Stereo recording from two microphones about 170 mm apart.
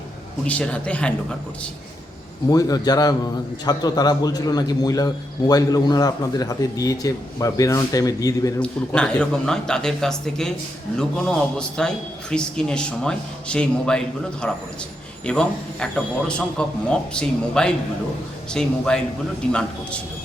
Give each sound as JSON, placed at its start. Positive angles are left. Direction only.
{"t": 0.4, "sound": "a man's voice", "side_deg": 5}
{"t": 2.5, "sound": "a man's voice", "side_deg": 20}
{"t": 8.5, "sound": "speech", "side_deg": 5}